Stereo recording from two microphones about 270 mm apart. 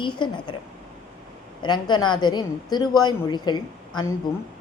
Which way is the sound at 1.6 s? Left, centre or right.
Centre.